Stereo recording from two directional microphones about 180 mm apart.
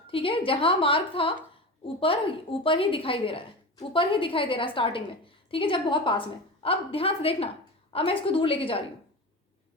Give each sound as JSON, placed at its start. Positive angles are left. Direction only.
{"t": 0.1, "sound": "a woman's voice", "side_deg": 30}